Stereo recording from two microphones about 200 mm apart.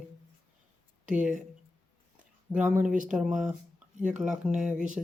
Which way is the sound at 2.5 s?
5° right (ahead or behind).